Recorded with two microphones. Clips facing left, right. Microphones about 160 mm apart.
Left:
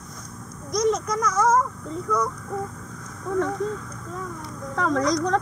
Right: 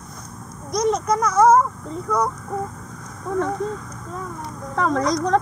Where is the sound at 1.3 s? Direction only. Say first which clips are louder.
Right 7 dB; 60° right (ahead or behind).